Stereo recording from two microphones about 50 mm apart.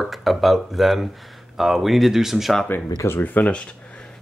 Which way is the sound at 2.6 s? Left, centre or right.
Left.